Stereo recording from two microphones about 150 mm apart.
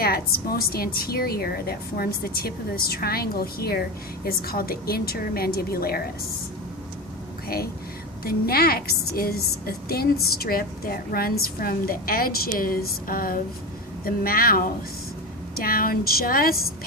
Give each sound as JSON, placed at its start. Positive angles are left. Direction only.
{"t": 0.0, "sound": "a woman's voice", "side_deg": 90}
{"t": 7.4, "sound": "a woman's voice", "side_deg": 90}